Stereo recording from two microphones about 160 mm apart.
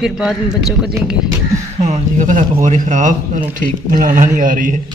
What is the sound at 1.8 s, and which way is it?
A man's voice, 50° right (ahead or behind).